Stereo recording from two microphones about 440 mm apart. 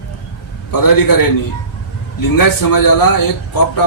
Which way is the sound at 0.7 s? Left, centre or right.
Left.